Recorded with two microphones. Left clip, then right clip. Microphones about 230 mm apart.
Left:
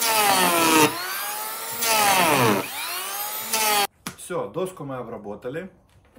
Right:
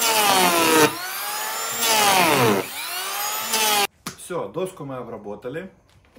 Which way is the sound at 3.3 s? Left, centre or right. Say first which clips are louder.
Right 6 dB; right.